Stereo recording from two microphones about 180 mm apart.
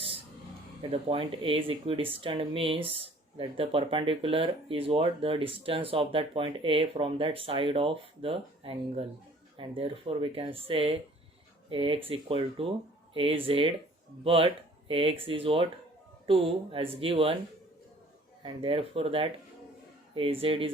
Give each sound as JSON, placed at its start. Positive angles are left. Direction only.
{"t": 0.8, "sound": "speech", "side_deg": -30}
{"t": 18.4, "sound": "speech", "side_deg": -30}